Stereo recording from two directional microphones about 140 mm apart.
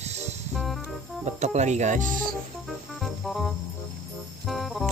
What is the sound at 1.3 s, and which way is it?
Speech, 55° right (ahead or behind).